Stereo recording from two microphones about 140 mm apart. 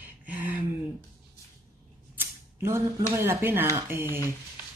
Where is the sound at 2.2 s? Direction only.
20° right (ahead or behind).